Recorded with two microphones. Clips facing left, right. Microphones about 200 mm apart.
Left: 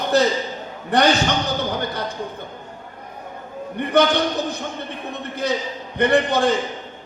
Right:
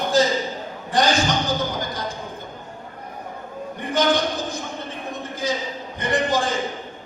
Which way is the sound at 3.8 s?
65° left (ahead or behind).